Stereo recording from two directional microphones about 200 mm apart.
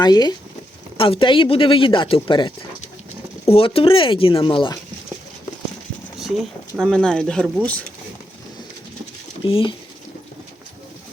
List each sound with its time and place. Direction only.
0.0 s speech: 20° left (ahead or behind)
3.5 s speech: 30° left (ahead or behind)
6.1 s speech: centre (ahead or behind)
9.4 s speech: 25° left (ahead or behind)